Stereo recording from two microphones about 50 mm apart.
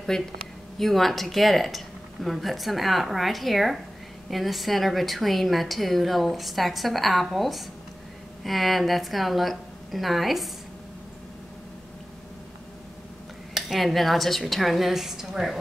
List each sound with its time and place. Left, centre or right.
0.1 s a woman's voice: centre
13.6 s a woman's voice: centre